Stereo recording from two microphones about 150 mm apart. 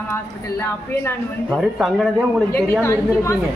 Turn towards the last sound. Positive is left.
turn(degrees=20)  # may be behind; listen again after turning